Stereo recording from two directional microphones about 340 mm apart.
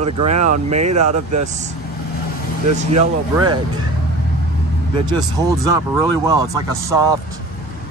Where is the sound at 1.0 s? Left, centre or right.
Right.